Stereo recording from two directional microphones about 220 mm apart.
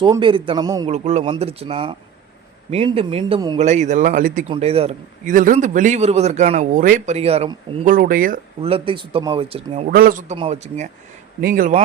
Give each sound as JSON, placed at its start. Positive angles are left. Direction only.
{"t": 0.0, "sound": "speech", "side_deg": -20}
{"t": 0.9, "sound": "a man's voice", "side_deg": -30}
{"t": 4.4, "sound": "a man's voice", "side_deg": -25}
{"t": 7.9, "sound": "a man's voice", "side_deg": -40}
{"t": 8.6, "sound": "speech", "side_deg": -25}
{"t": 9.9, "sound": "a man's voice", "side_deg": -40}
{"t": 10.3, "sound": "a man's voice", "side_deg": -25}
{"t": 11.3, "sound": "a man's voice", "side_deg": -40}